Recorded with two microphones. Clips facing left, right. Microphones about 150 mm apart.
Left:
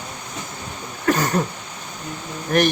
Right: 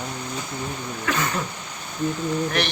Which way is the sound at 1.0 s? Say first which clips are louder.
Left 6 dB; 40° left (ahead or behind).